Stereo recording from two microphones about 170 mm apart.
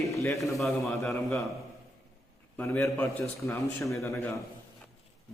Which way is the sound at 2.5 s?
15° left (ahead or behind).